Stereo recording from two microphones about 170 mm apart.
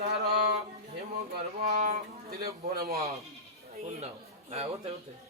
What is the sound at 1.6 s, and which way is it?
Speech, 40° right (ahead or behind).